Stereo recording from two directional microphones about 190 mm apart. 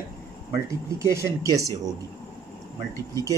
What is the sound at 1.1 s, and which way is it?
Speech, 15° right (ahead or behind).